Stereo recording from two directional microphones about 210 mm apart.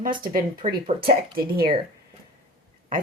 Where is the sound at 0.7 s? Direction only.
45° right (ahead or behind).